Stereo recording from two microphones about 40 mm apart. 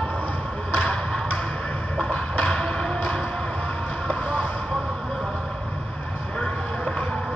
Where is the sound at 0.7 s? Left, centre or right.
Centre.